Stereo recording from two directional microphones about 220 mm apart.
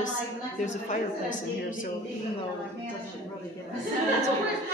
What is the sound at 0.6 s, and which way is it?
Speech, 35° left (ahead or behind).